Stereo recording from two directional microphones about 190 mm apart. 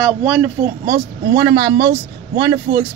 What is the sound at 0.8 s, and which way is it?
Speech, 55° right (ahead or behind).